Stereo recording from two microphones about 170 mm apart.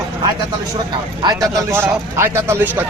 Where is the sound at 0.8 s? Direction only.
25° right (ahead or behind).